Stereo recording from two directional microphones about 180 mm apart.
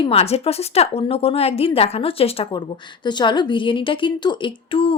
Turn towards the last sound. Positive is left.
turn(degrees=30)  # may be behind; listen again after turning